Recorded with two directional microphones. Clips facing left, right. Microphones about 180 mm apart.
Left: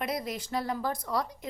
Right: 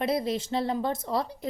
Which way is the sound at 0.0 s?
30° right (ahead or behind).